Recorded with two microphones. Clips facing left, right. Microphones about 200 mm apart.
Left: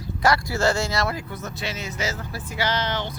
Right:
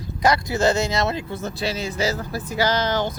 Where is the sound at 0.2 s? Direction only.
20° right (ahead or behind).